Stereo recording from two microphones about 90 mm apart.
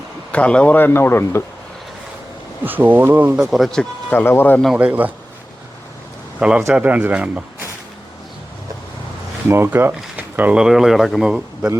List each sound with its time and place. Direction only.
0.3 s a man's voice: 15° left (ahead or behind)
2.6 s speech: 20° right (ahead or behind)
3.5 s speech: 5° left (ahead or behind)
4.1 s a man's voice: 20° left (ahead or behind)
4.7 s speech: 15° right (ahead or behind)
6.4 s speech: 10° right (ahead or behind)
9.5 s speech: 25° right (ahead or behind)
10.6 s speech: 5° right (ahead or behind)
11.3 s a man's voice: 10° right (ahead or behind)